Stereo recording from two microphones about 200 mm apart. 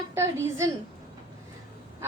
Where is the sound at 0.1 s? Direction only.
15° right (ahead or behind).